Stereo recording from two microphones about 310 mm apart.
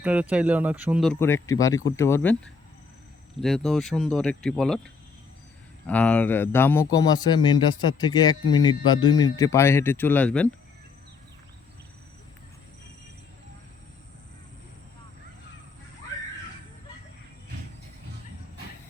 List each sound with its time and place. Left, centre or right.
0.0 s speech: centre
5.9 s a man's voice: centre